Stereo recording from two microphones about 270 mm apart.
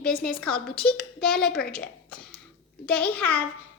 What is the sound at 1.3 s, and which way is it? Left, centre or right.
Speech, left.